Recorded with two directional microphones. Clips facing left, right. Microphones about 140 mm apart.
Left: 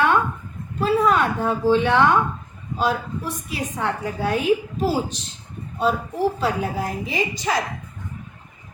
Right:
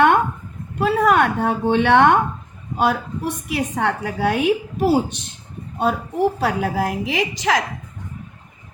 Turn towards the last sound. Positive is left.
turn(degrees=-90)